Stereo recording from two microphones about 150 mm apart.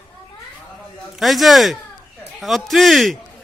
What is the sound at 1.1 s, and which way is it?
A man's voice, centre (ahead or behind).